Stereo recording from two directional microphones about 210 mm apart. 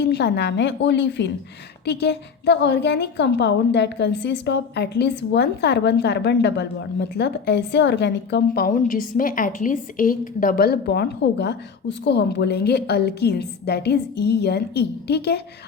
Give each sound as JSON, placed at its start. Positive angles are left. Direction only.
{"t": 0.0, "sound": "a woman's voice", "side_deg": 55}